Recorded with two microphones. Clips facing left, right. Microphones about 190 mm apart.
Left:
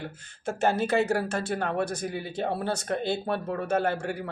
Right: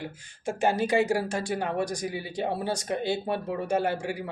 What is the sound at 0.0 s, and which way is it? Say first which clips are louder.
Speech: even; 15° right (ahead or behind).